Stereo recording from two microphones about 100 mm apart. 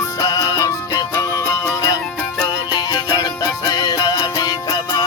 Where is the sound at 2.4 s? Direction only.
40° left (ahead or behind).